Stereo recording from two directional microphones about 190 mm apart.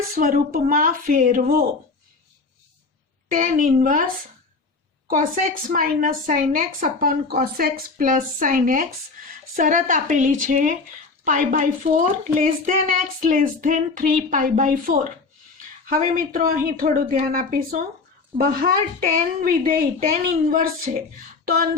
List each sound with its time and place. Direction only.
0.2 s a child's voice: 45° right (ahead or behind)
3.2 s a child's voice: 45° right (ahead or behind)
21.4 s a sound: 50° right (ahead or behind)